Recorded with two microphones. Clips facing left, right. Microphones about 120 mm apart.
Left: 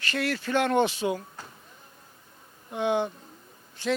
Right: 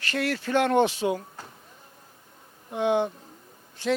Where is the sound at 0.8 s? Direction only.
55° right (ahead or behind).